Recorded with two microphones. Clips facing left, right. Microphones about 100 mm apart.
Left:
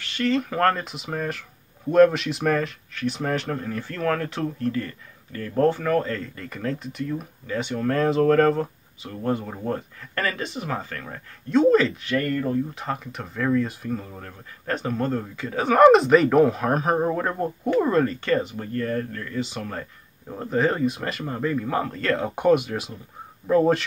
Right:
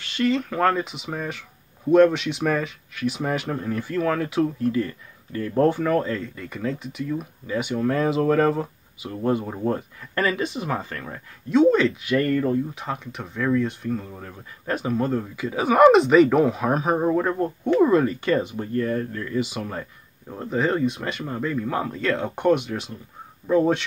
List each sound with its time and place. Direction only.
0.0 s a sound: 20° right (ahead or behind)
0.3 s speech: centre (ahead or behind); by 6.1 s 15° right (ahead or behind)
6.1 s speech: 5° right (ahead or behind)
9.1 s speech: 20° right (ahead or behind)
11.5 s speech: centre (ahead or behind)
20.2 s speech: centre (ahead or behind)